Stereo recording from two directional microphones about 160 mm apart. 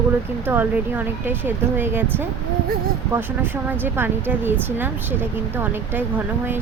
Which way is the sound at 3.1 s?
10° right (ahead or behind).